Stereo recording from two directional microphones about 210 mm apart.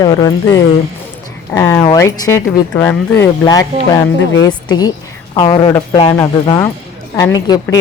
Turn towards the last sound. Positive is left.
turn(degrees=20)  # may be behind; listen again after turning